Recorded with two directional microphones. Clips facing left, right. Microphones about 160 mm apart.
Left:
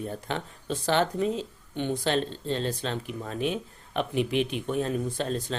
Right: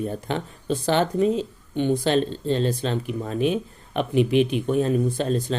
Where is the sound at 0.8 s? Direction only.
15° right (ahead or behind).